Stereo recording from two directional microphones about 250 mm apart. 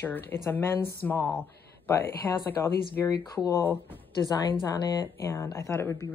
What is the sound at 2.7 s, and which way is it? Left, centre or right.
Speech, left.